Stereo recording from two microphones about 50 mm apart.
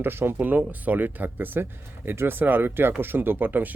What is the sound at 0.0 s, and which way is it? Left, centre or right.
Speech, right.